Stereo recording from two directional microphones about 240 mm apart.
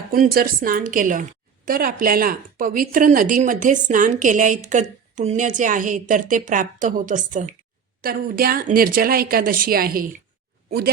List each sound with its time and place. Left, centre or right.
0.1 s a woman's voice: right